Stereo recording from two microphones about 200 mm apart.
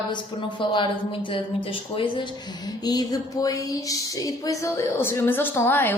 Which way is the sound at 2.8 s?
20° left (ahead or behind).